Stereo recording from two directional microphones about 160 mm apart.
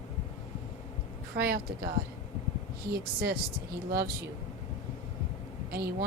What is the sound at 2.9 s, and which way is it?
Speech, 85° right.